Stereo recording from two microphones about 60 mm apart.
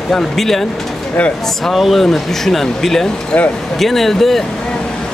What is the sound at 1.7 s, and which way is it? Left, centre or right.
Speech, centre.